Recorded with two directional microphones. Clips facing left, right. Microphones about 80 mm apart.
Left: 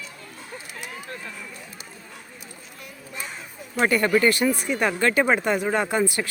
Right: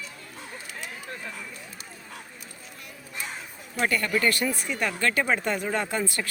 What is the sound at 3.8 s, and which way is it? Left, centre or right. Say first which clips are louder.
Speech: left 5 dB; left.